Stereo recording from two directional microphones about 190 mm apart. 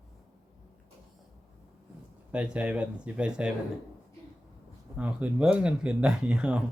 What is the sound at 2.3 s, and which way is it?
Speech, 5° right (ahead or behind).